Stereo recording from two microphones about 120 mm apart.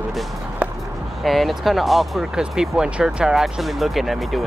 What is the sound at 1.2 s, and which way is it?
Speech, centre (ahead or behind).